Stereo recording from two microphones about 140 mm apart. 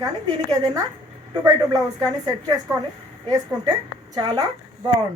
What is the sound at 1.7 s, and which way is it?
Speech, 25° right (ahead or behind).